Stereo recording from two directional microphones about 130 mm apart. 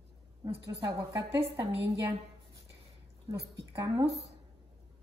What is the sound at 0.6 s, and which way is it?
Speech, 25° right (ahead or behind).